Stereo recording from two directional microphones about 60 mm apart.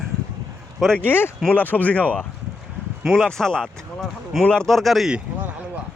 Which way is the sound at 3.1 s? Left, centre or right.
Centre.